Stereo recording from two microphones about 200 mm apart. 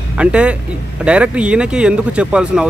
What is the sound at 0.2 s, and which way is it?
Speech, 5° right (ahead or behind).